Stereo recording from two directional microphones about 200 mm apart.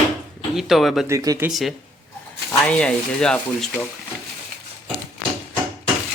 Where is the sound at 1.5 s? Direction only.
Centre (ahead or behind).